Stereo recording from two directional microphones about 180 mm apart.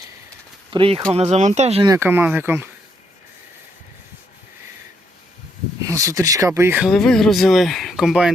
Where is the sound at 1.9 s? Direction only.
10° right (ahead or behind).